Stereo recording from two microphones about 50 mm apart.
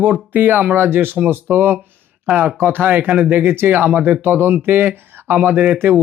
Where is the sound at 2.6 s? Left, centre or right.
Right.